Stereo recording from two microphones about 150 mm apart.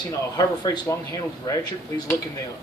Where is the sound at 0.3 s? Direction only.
25° left (ahead or behind).